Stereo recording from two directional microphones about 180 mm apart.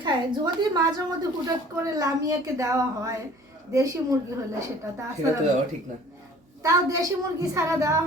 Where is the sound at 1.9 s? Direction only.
20° right (ahead or behind).